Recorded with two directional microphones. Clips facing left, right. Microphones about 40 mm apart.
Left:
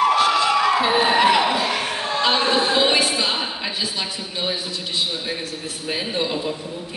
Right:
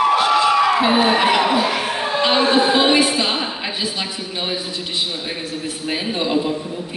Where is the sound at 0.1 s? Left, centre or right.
Centre.